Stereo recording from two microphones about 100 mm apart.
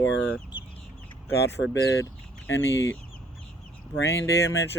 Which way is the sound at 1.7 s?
30° left (ahead or behind).